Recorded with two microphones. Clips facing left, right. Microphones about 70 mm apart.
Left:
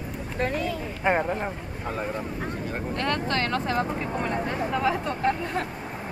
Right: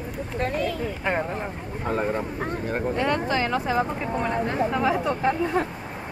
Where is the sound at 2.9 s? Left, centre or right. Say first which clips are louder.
Right 1 dB; centre.